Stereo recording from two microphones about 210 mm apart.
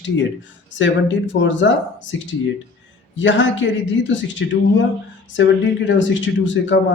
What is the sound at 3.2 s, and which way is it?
Speech, 60° left (ahead or behind).